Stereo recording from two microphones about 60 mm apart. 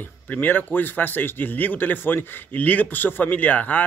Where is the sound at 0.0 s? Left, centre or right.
Left.